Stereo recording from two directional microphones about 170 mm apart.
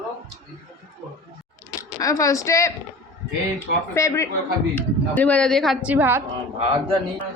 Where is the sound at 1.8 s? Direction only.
20° left (ahead or behind).